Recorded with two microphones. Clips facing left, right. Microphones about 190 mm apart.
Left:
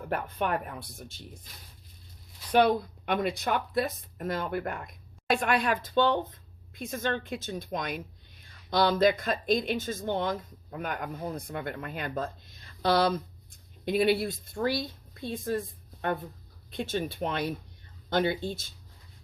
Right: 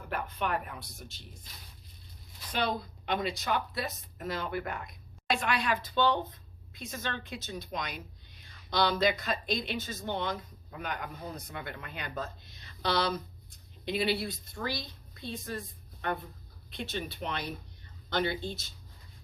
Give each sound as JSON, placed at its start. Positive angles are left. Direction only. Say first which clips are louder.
{"t": 0.1, "sound": "speech", "louder": "left 3 dB", "side_deg": 50}
{"t": 2.5, "sound": "a woman's voice", "louder": "left 9 dB", "side_deg": 60}